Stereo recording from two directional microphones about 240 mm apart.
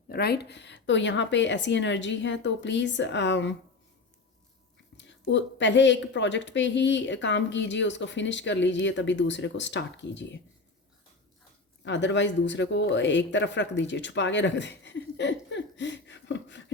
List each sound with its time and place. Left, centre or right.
0.1 s a woman's voice: left
4.9 s a woman's voice: left
11.9 s a woman's voice: left